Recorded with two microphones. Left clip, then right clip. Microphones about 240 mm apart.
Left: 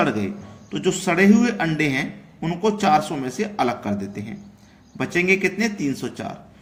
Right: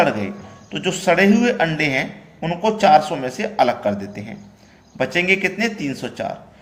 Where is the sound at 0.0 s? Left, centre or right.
Centre.